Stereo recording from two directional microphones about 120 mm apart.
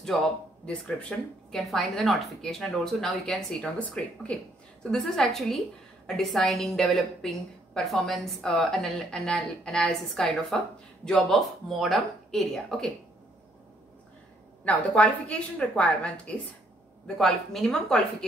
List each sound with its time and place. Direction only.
0.7 s a woman's voice: 10° left (ahead or behind)
14.6 s a woman's voice: 10° left (ahead or behind)